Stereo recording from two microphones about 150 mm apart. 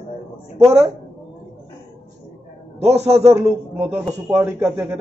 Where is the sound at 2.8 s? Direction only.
45° right (ahead or behind).